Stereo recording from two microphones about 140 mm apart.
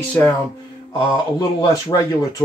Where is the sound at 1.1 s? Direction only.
30° left (ahead or behind).